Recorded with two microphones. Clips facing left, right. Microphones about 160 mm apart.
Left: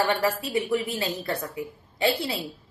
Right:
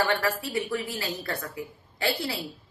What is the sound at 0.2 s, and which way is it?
A woman's voice, 20° left (ahead or behind).